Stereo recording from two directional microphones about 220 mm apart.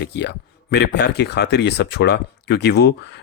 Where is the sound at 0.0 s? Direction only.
50° left (ahead or behind).